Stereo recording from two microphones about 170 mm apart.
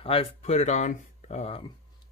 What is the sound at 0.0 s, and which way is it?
Speech, 35° left (ahead or behind).